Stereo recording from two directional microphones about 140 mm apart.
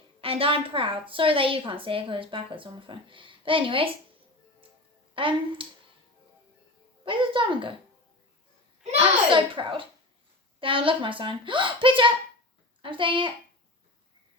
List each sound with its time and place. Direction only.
0.2 s a woman's voice: 40° right (ahead or behind)
5.1 s a woman's voice: 40° right (ahead or behind)
7.0 s a woman's voice: 35° right (ahead or behind)
8.8 s a woman's voice: 45° right (ahead or behind)